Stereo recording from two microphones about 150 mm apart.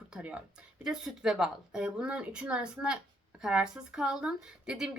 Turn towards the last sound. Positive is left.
turn(degrees=-5)  # may be behind; listen again after turning